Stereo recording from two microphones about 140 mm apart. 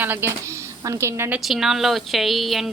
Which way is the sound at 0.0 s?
15° right (ahead or behind).